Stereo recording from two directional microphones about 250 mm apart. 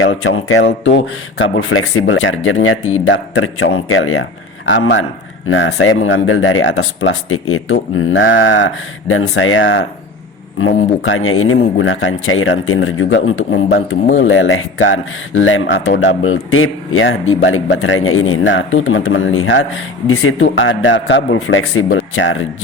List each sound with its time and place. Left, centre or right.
0.0 s speech: left
11.0 s speech: left